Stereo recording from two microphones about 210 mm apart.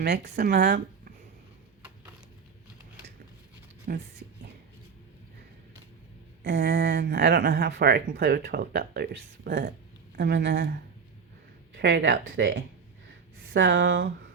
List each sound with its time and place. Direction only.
0.0 s speech: 50° right (ahead or behind)
3.9 s speech: 45° right (ahead or behind)
6.4 s speech: 55° right (ahead or behind)
11.8 s speech: 60° right (ahead or behind)